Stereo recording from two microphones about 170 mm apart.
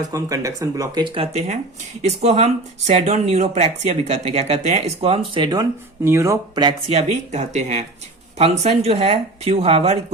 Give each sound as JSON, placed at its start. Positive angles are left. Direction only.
{"t": 0.1, "sound": "speech", "side_deg": -20}
{"t": 6.9, "sound": "speech", "side_deg": -40}